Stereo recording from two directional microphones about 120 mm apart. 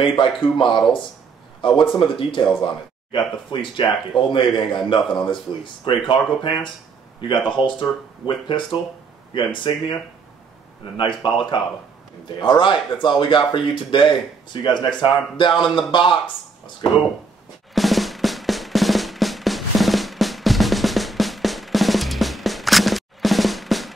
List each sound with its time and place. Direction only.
0.0 s speech: 45° left (ahead or behind)
11.0 s speech: 40° left (ahead or behind)
17.7 s drum: centre (ahead or behind)